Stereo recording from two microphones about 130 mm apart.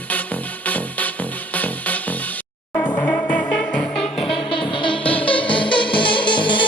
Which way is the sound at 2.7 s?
15° left (ahead or behind).